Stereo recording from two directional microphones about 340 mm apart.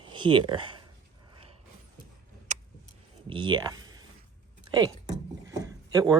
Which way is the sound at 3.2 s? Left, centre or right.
Centre.